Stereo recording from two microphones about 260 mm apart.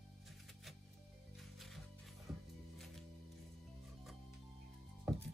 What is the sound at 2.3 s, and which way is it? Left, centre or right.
Music, centre.